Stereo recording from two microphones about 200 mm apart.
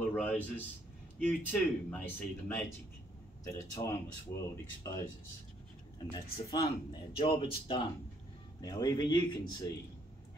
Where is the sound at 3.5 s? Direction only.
15° left (ahead or behind).